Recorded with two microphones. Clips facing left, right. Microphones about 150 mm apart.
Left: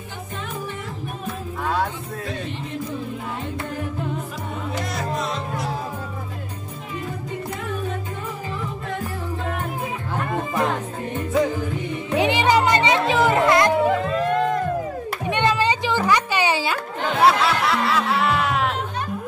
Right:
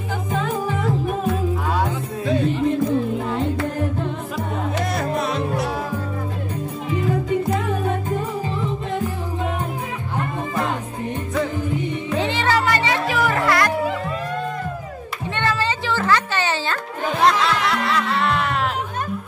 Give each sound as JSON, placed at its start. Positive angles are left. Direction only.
{"t": 4.9, "sound": "music", "side_deg": -60}
{"t": 7.1, "sound": "music", "side_deg": -90}
{"t": 12.2, "sound": "music", "side_deg": 15}
{"t": 14.3, "sound": "music", "side_deg": 85}
{"t": 15.2, "sound": "music", "side_deg": 15}